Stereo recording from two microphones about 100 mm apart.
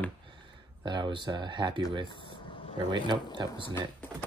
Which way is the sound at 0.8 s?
50° right (ahead or behind).